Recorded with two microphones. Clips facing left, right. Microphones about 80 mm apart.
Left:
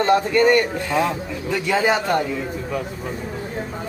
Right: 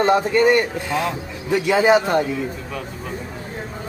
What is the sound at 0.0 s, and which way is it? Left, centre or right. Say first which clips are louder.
Speech: even; centre.